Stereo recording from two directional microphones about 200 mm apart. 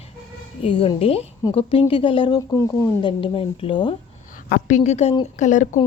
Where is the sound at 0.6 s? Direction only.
25° left (ahead or behind).